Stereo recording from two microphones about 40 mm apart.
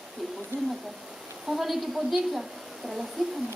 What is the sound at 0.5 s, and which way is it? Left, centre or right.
Speech, right.